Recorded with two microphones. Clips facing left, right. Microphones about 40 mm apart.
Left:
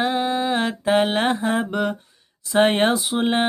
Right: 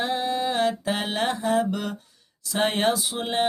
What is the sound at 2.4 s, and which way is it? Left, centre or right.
Speech, left.